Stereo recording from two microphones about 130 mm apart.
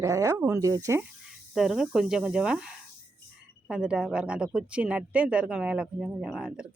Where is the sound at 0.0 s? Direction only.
25° right (ahead or behind).